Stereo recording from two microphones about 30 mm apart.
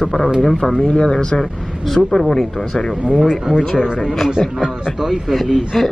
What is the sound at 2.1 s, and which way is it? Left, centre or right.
Speech, centre.